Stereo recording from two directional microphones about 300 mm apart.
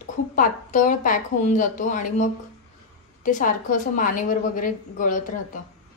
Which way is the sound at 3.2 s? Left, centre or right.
Left.